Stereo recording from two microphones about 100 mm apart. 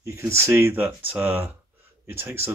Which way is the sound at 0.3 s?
25° right (ahead or behind).